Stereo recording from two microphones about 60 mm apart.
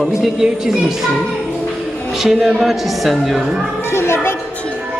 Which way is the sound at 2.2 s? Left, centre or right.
Centre.